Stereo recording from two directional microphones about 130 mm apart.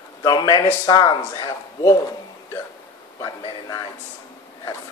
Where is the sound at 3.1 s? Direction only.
30° left (ahead or behind).